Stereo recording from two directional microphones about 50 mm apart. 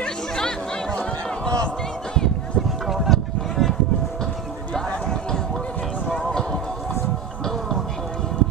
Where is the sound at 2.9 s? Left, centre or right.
Centre.